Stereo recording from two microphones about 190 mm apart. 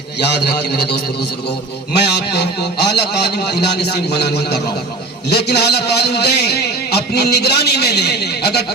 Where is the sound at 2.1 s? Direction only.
60° left (ahead or behind).